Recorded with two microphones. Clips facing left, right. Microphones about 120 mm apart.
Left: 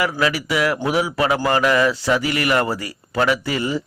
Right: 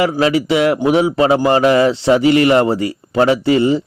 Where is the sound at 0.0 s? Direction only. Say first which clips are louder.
Right 6 dB; 25° right (ahead or behind).